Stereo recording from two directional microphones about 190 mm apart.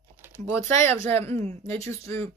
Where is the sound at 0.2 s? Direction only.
15° right (ahead or behind).